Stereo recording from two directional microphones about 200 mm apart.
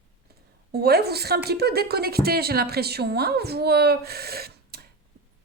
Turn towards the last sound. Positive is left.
turn(degrees=-50)  # may be behind; listen again after turning